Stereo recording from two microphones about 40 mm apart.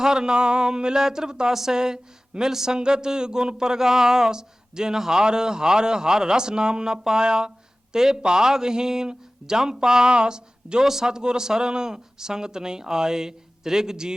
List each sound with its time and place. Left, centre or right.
0.0 s speech: centre